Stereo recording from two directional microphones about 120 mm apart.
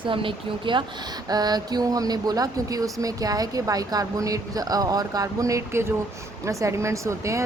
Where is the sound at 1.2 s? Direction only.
35° right (ahead or behind).